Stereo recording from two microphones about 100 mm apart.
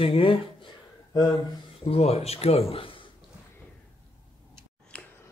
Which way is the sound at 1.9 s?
90° left.